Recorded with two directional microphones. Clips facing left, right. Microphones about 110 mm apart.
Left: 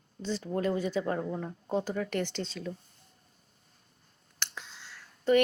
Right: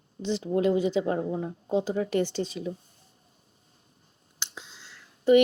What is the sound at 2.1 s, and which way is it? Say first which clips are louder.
Speech: right 6 dB; 60° left (ahead or behind).